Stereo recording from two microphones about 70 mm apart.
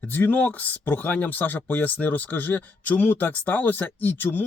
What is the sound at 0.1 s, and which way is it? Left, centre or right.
Speech, left.